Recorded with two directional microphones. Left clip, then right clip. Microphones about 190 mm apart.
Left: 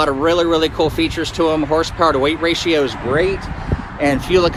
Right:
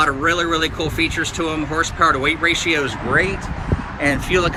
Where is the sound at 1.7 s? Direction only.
45° right (ahead or behind).